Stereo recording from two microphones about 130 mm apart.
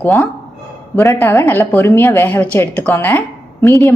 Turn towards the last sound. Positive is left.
turn(degrees=20)  # may be behind; listen again after turning